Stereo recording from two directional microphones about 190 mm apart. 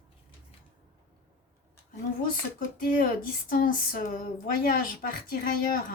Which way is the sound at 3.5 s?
45° left (ahead or behind).